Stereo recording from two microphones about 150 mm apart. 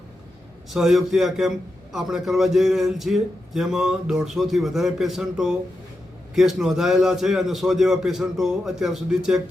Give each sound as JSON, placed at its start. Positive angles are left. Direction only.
{"t": 0.7, "sound": "a man's voice", "side_deg": 0}